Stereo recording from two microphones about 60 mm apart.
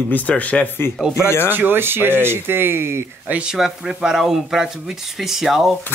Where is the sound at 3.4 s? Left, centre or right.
Centre.